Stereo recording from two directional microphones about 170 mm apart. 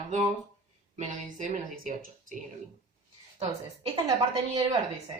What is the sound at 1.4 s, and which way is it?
Speech, 50° right (ahead or behind).